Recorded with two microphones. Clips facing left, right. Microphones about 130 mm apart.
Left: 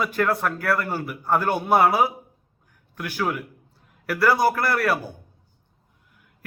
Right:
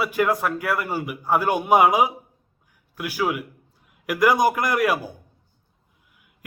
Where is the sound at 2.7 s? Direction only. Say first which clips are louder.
Right 2 dB; 10° right (ahead or behind).